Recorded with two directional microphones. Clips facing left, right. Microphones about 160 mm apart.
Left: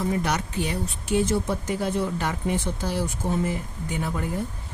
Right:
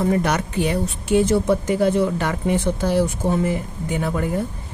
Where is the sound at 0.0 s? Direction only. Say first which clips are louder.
Right 6 dB; 60° right (ahead or behind).